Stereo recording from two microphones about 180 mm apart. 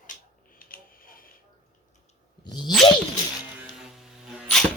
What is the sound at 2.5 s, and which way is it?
Speech, 25° left (ahead or behind).